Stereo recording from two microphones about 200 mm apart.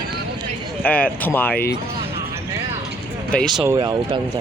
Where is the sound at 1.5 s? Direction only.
50° left (ahead or behind).